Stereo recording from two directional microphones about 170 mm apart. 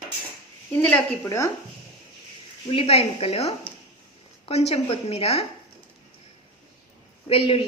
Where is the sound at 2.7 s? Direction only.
35° left (ahead or behind).